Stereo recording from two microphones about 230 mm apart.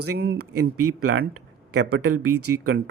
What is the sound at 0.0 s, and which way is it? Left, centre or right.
Speech, right.